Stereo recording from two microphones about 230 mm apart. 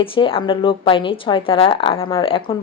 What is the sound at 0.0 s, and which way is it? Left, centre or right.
A woman's voice, left.